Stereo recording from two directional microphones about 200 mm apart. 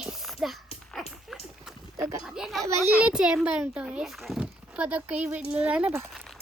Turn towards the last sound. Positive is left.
turn(degrees=0)  # may be behind; listen again after turning